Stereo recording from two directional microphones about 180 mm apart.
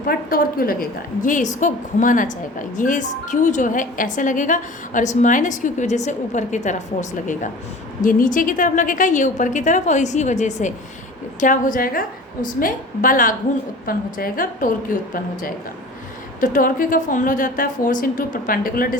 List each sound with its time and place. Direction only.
0.0 s a woman's voice: 55° left (ahead or behind)